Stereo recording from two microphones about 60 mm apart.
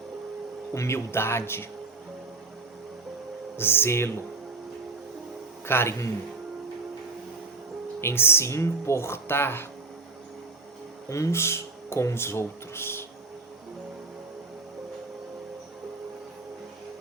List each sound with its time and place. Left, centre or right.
0.7 s speech: left
3.6 s speech: left
5.6 s a man's voice: left
8.0 s speech: left
11.1 s speech: left